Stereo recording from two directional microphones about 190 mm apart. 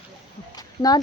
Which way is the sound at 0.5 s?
20° left (ahead or behind).